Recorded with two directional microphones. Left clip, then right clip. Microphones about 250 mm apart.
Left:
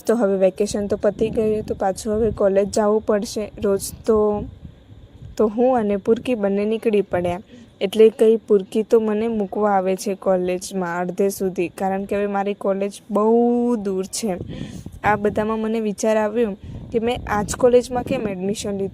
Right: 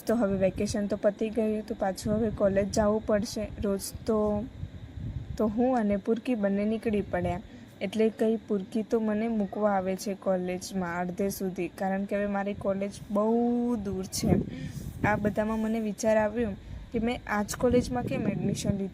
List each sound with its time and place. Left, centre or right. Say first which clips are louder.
0.0 s speech: left 9 dB; left